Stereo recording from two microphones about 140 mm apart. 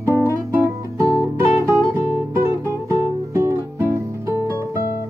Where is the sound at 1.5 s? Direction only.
20° right (ahead or behind).